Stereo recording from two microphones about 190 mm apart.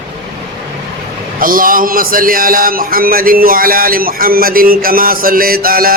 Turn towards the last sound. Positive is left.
turn(degrees=-50)  # may be behind; listen again after turning